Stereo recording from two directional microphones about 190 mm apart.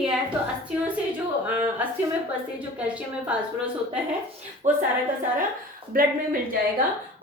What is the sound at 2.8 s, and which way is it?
Speech, 5° right (ahead or behind).